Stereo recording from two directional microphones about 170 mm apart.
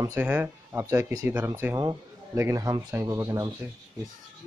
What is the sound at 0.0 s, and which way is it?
Rub, 10° right (ahead or behind).